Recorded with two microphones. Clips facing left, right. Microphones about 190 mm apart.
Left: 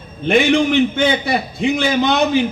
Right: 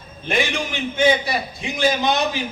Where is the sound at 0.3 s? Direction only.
60° left (ahead or behind).